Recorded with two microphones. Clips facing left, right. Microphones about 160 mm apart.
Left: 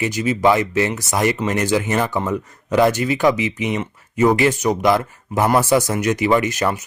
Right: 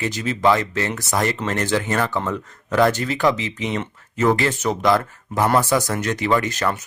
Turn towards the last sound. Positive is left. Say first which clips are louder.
# left 3 dB
turn(degrees=20)  # may be behind; listen again after turning